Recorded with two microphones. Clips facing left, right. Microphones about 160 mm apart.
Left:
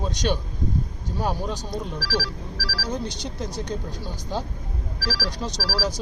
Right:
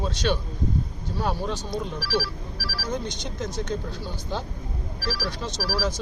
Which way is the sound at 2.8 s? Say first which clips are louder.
Even; 35° left (ahead or behind).